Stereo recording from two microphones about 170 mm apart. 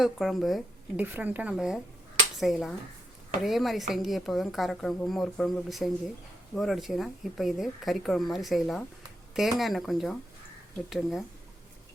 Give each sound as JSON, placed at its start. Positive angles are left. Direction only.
{"t": 0.0, "sound": "speech", "side_deg": 0}
{"t": 1.0, "sound": "a woman's voice", "side_deg": -10}